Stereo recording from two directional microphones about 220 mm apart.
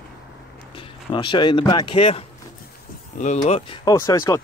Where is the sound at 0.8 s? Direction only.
20° left (ahead or behind).